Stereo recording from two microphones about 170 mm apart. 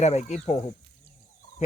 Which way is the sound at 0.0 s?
40° left (ahead or behind).